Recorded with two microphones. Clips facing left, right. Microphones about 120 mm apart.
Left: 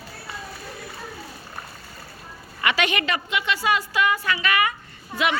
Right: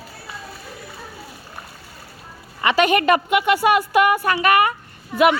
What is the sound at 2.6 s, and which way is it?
A woman's voice, 40° right (ahead or behind).